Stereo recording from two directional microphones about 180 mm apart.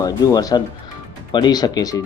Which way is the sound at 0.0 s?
20° left (ahead or behind).